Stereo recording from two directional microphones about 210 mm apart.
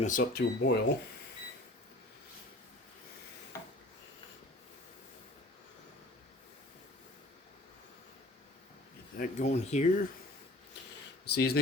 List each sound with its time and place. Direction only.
0.0 s speech: 40° left (ahead or behind)
9.1 s speech: 40° left (ahead or behind)
11.3 s speech: 50° left (ahead or behind)